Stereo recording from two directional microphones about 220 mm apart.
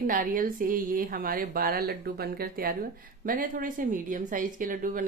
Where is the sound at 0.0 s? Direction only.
40° right (ahead or behind).